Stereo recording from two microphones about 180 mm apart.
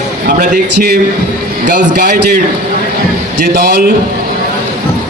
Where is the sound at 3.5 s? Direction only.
65° right (ahead or behind).